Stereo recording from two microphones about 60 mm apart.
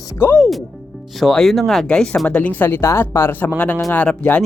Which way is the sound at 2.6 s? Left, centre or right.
Left.